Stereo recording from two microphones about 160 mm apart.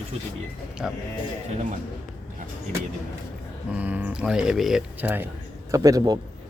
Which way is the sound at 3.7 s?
10° right (ahead or behind).